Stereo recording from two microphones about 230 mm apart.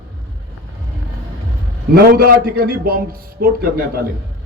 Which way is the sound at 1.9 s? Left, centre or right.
Right.